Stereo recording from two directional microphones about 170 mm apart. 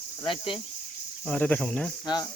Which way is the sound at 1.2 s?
5° left (ahead or behind).